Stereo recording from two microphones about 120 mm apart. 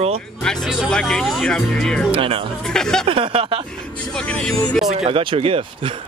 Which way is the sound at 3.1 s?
45° right (ahead or behind).